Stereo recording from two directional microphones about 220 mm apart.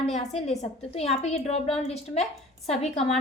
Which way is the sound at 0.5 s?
30° left (ahead or behind).